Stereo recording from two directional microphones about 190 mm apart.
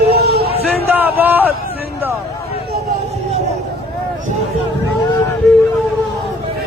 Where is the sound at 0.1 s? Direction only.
55° right (ahead or behind).